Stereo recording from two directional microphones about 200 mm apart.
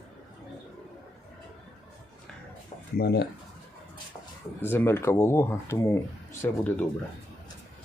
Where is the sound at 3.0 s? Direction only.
55° left (ahead or behind).